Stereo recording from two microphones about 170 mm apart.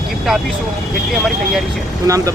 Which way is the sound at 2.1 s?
20° right (ahead or behind).